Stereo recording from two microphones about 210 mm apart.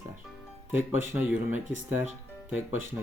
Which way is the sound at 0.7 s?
10° right (ahead or behind).